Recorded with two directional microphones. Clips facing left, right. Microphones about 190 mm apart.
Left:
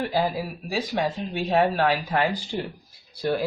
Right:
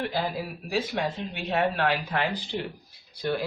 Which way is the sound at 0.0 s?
40° left (ahead or behind).